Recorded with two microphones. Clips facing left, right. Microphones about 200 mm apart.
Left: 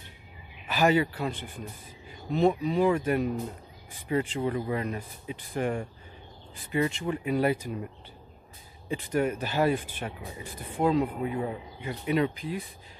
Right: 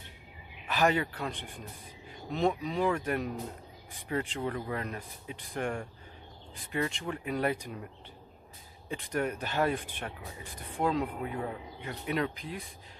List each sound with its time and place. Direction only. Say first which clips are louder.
0.7 s speech: left 4 dB; 5° left (ahead or behind)
8.8 s speech: left 5 dB; centre (ahead or behind)